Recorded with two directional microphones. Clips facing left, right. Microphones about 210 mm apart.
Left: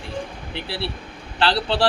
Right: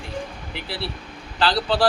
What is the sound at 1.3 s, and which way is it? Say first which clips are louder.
Speech: even; 25° left (ahead or behind).